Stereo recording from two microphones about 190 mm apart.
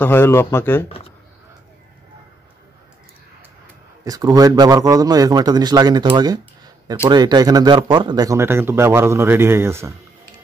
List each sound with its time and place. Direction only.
0.0 s speech: 10° left (ahead or behind)
4.0 s a man's voice: 20° right (ahead or behind)